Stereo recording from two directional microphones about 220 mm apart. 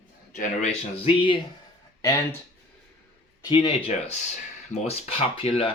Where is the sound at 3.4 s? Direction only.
20° left (ahead or behind).